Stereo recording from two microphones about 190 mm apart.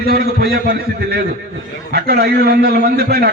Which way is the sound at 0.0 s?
55° right (ahead or behind).